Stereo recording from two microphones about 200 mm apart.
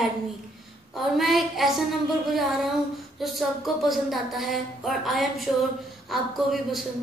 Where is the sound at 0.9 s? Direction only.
Centre (ahead or behind).